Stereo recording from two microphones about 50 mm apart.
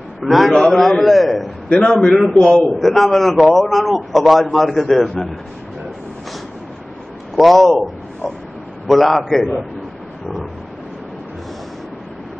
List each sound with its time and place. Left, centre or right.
0.2 s a man's voice: centre
1.7 s a man's voice: centre
2.6 s a man's voice: centre
7.3 s a man's voice: centre